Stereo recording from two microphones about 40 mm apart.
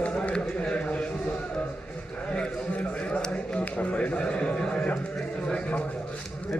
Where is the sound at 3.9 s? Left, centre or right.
Left.